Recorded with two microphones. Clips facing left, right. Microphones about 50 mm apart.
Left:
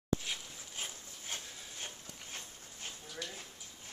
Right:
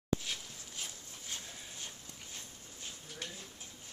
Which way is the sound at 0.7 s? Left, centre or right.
Left.